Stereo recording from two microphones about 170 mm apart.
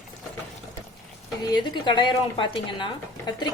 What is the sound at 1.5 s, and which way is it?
A woman's voice, 25° left (ahead or behind).